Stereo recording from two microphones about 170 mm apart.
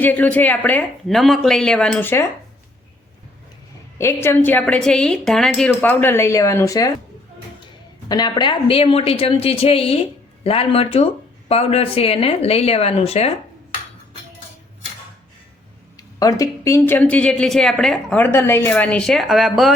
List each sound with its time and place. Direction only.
0.0 s speech: 10° left (ahead or behind)
3.9 s speech: 15° left (ahead or behind)
8.0 s a woman's voice: 25° left (ahead or behind)
16.1 s speech: 20° left (ahead or behind); by 19.7 s centre (ahead or behind)